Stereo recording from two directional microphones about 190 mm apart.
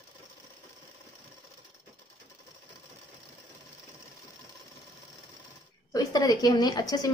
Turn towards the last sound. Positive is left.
turn(degrees=20)  # may be behind; listen again after turning